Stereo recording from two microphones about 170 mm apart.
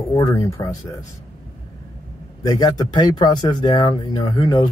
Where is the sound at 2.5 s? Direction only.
20° left (ahead or behind).